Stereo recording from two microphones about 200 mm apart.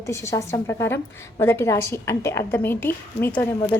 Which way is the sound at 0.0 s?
15° left (ahead or behind).